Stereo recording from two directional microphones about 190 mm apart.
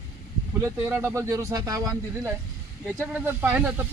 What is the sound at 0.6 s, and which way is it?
Speech, 10° right (ahead or behind).